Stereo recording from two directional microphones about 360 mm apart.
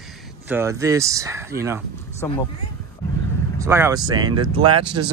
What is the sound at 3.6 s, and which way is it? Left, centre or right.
Speech, centre.